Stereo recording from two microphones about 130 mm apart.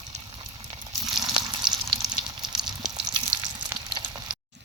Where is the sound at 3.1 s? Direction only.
35° right (ahead or behind).